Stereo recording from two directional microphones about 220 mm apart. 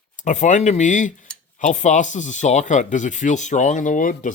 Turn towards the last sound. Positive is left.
turn(degrees=35)  # may be behind; listen again after turning